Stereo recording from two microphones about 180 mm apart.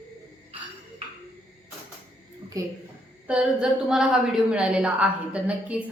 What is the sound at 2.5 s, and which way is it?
Speech, 20° right (ahead or behind).